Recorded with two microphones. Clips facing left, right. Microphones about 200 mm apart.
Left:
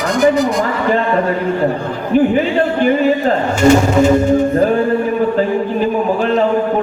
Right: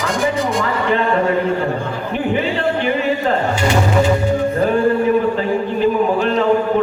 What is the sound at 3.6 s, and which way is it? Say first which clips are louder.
Music: left 7 dB; 45° left (ahead or behind).